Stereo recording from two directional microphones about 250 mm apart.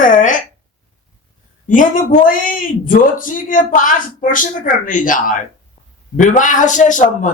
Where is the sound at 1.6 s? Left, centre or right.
Left.